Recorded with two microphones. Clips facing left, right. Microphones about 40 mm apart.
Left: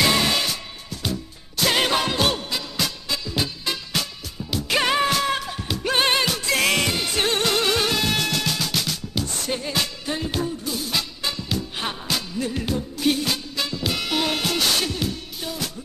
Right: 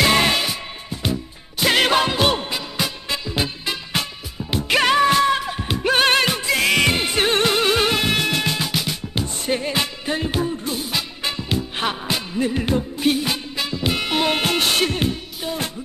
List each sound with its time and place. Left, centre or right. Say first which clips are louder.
0.1 s music: right 3 dB; right
6.5 s music: right 2 dB; centre
6.8 s music: right 4 dB; right
10.5 s music: right 2 dB; right